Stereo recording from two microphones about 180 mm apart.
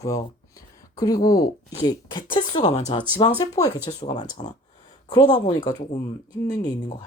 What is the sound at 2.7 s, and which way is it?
Speech, 40° left (ahead or behind).